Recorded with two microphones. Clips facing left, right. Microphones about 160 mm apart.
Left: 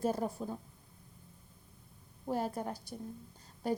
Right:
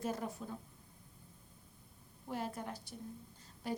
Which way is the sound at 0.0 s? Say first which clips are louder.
Left 6 dB; 35° left (ahead or behind).